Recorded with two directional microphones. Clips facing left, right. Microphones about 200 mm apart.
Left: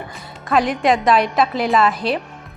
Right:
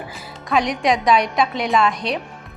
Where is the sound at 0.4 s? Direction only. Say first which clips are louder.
Left 2 dB; centre (ahead or behind).